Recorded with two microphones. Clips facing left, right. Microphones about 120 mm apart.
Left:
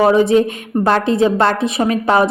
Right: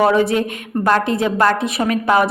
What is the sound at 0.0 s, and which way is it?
A woman's voice, 20° left (ahead or behind).